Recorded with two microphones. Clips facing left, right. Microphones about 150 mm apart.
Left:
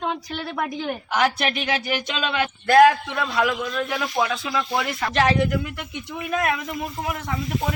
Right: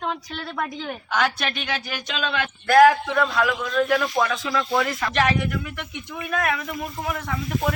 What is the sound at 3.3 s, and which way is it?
A woman's voice, 15° left (ahead or behind).